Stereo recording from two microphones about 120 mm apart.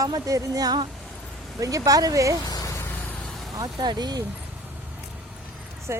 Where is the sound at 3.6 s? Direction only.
35° right (ahead or behind).